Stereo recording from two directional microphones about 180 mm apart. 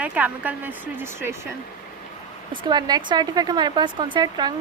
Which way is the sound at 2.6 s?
25° right (ahead or behind).